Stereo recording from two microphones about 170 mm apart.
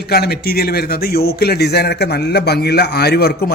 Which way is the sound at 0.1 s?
65° left (ahead or behind).